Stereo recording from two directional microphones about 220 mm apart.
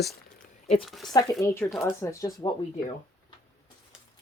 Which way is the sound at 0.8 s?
Centre (ahead or behind).